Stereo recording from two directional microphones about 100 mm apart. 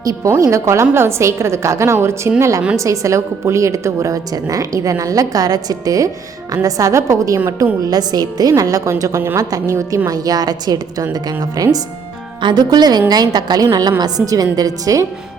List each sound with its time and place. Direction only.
0.0 s a woman's voice: 35° right (ahead or behind)